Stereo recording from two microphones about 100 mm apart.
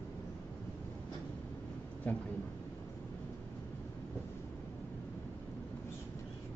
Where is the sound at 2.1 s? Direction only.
15° left (ahead or behind).